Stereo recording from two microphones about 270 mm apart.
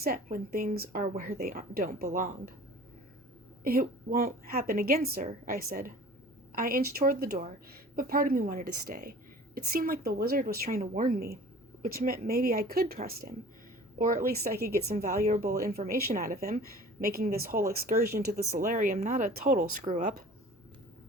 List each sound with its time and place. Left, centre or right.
0.0 s a woman's voice: right
3.6 s a woman's voice: right